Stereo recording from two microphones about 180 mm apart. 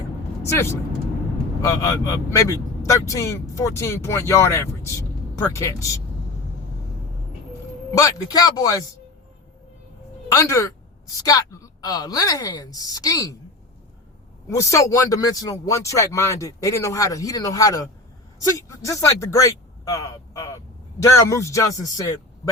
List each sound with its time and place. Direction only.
0.4 s speech: 15° left (ahead or behind)
1.8 s speech: 20° left (ahead or behind)
7.9 s speech: 20° left (ahead or behind)
10.2 s a woman's voice: 15° left (ahead or behind)
14.5 s speech: 15° left (ahead or behind)